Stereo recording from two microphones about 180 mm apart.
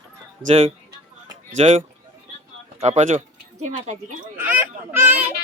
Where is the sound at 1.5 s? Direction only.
35° right (ahead or behind).